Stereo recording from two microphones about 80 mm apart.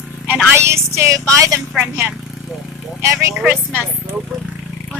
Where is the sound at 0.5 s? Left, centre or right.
Right.